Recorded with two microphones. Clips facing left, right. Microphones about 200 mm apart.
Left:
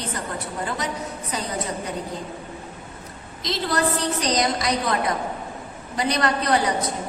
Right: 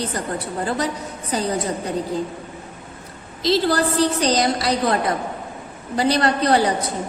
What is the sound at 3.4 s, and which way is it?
A woman's voice, 30° right (ahead or behind).